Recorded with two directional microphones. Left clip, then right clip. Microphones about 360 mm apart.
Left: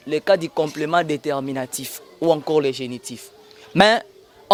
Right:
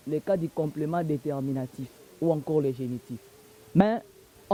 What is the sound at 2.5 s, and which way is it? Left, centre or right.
Speech, centre.